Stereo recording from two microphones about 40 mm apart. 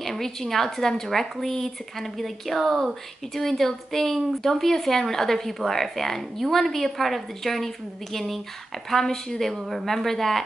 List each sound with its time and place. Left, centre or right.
0.0 s speech: centre